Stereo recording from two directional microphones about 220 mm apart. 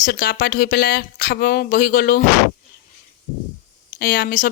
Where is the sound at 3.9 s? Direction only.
45° left (ahead or behind).